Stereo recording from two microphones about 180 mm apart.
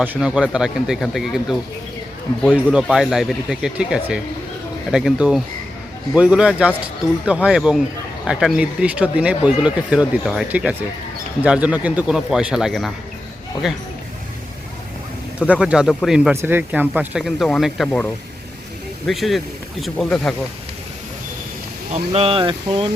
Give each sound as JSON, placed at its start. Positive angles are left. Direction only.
{"t": 0.0, "sound": "speech", "side_deg": -5}
{"t": 15.4, "sound": "speech", "side_deg": -5}
{"t": 16.3, "sound": "speech", "side_deg": -15}
{"t": 22.1, "sound": "speech", "side_deg": -30}